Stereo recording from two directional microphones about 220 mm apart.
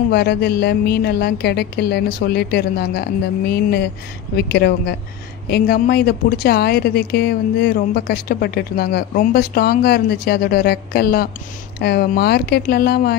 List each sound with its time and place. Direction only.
0.1 s speech: 50° left (ahead or behind)